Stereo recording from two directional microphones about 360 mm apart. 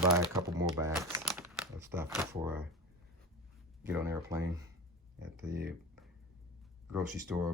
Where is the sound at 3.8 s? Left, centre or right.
Centre.